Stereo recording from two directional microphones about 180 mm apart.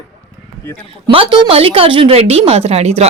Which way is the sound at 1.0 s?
25° right (ahead or behind).